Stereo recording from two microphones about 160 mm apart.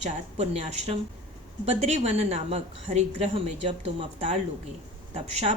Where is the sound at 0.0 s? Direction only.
45° right (ahead or behind).